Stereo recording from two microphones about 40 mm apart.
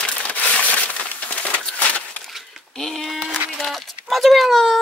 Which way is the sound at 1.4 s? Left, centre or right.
Left.